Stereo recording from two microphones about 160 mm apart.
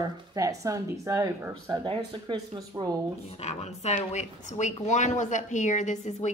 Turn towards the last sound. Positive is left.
turn(degrees=45)  # may be behind; listen again after turning